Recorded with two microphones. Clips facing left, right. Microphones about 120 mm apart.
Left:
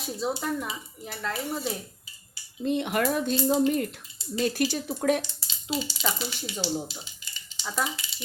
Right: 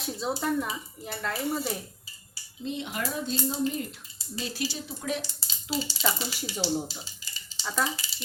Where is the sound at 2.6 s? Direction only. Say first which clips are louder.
Left 7 dB; 60° left (ahead or behind).